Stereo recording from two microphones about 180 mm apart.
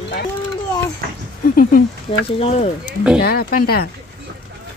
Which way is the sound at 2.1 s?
30° left (ahead or behind).